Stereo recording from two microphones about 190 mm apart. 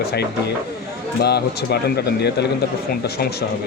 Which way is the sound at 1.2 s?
55° left (ahead or behind).